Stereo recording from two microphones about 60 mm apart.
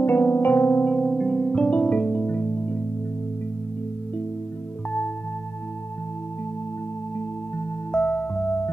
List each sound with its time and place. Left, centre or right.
0.0 s music: left
1.0 s music: centre
7.2 s music: centre